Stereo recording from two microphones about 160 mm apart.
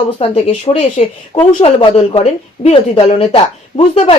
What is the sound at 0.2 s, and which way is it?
Speech, 40° left (ahead or behind).